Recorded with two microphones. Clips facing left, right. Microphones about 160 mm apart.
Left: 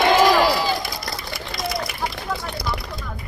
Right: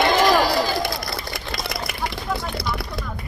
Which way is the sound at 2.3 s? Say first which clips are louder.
Right 4 dB; 5° right (ahead or behind).